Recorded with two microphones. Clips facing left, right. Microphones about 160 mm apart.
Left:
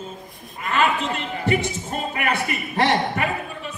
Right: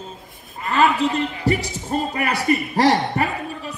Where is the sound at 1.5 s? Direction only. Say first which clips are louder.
Left 1 dB; 35° right (ahead or behind).